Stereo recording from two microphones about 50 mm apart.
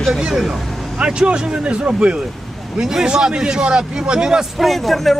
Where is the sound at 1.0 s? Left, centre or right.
Centre.